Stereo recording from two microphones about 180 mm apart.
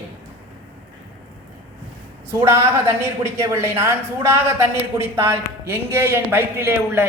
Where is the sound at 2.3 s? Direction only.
15° right (ahead or behind).